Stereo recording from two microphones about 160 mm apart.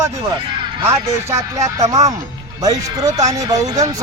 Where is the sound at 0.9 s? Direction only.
20° right (ahead or behind).